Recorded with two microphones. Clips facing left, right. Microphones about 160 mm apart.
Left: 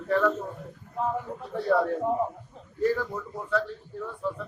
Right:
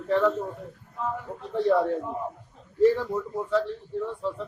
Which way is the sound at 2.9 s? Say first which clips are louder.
Right 4 dB; 25° right (ahead or behind).